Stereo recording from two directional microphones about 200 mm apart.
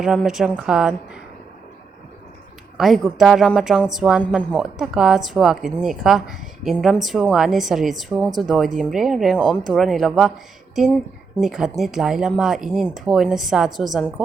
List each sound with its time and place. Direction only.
0.0 s speech: centre (ahead or behind)
2.7 s speech: centre (ahead or behind)